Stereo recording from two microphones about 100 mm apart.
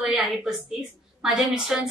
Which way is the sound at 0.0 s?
5° right (ahead or behind).